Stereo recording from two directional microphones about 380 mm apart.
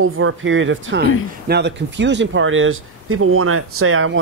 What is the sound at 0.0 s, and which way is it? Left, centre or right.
Speech, right.